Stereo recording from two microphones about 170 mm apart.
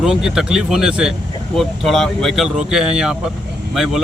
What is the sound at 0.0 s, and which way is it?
Speech, 5° right (ahead or behind).